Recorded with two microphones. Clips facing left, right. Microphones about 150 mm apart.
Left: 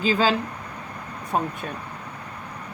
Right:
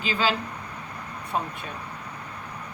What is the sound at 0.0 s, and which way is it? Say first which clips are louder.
Speech: left 5 dB; 40° left (ahead or behind).